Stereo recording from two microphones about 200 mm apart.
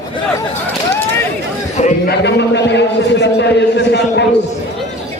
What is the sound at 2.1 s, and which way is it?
A man's voice, 60° left (ahead or behind).